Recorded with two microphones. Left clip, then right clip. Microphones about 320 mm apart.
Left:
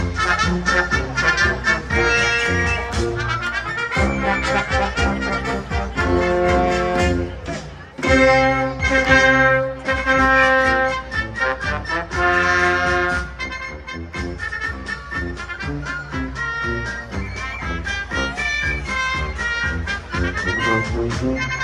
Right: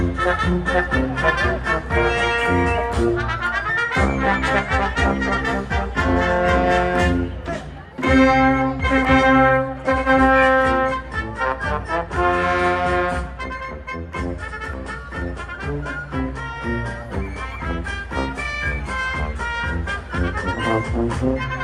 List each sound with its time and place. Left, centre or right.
0.2 s music: centre